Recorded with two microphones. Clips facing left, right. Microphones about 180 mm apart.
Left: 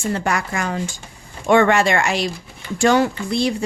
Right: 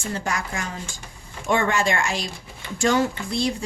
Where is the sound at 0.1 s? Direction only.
65° left (ahead or behind).